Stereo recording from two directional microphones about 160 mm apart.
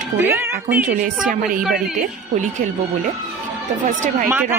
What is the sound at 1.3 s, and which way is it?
Speech, 60° right (ahead or behind).